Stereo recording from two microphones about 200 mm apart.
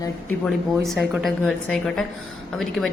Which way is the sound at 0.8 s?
Centre (ahead or behind).